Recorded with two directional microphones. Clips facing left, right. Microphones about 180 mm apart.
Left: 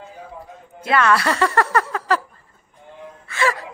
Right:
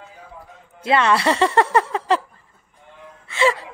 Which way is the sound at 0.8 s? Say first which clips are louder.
Right 1 dB; 25° right (ahead or behind).